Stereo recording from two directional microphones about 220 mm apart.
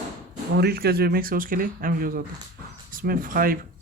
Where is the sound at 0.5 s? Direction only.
45° right (ahead or behind).